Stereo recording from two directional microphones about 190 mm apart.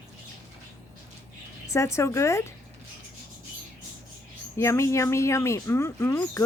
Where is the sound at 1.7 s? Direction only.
15° left (ahead or behind).